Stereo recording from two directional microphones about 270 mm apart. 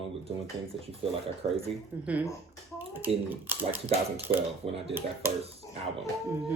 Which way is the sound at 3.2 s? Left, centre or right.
Centre.